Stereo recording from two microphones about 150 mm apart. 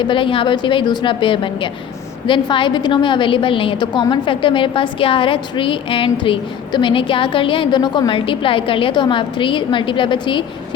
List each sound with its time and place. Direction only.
0.0 s a woman's voice: 35° left (ahead or behind)